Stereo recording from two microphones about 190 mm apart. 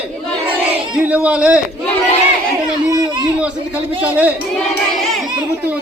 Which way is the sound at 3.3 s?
5° right (ahead or behind).